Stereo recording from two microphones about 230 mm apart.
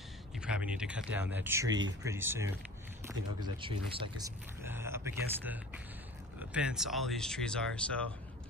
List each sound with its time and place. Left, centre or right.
0.4 s speech: centre; by 4.3 s right
4.6 s a sound: centre
6.5 s speech: centre